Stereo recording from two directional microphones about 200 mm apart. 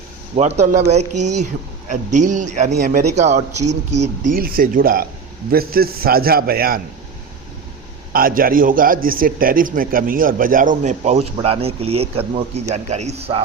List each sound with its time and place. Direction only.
0.3 s speech: 35° right (ahead or behind)
8.1 s speech: 45° right (ahead or behind); by 13.4 s 30° right (ahead or behind)